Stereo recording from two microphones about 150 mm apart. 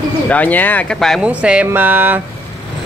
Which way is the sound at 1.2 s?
10° right (ahead or behind).